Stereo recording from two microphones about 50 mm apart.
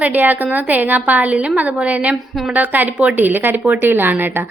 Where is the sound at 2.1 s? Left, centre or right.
Centre.